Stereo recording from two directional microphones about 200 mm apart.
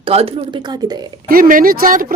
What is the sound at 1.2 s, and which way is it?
Speech, 45° right (ahead or behind).